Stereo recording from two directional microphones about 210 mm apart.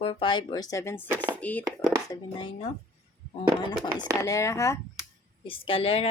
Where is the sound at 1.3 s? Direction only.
5° left (ahead or behind).